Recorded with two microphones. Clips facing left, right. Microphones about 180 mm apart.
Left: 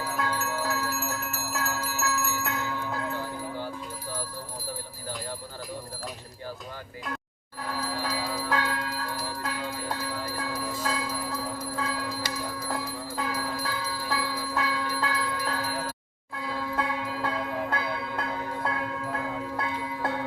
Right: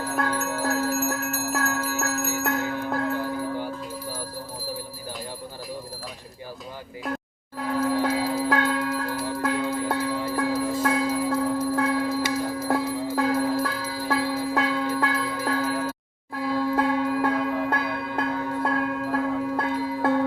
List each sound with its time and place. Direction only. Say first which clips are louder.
0.0 s bell: right 4 dB; 50° right (ahead or behind)
7.8 s bell: right 10 dB; 50° right (ahead or behind)
8.4 s bell: right 6 dB; 60° right (ahead or behind)
16.3 s music: right 8 dB; 55° right (ahead or behind)